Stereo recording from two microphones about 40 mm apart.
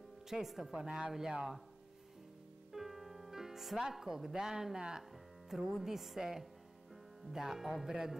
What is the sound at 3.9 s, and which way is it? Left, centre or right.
A woman's voice, centre.